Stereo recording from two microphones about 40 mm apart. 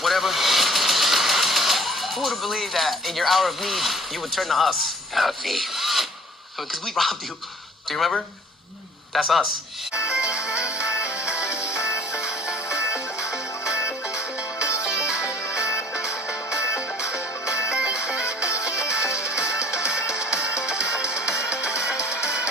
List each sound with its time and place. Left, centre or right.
0.0 s speech: centre
9.1 s speech: centre
9.9 s music: right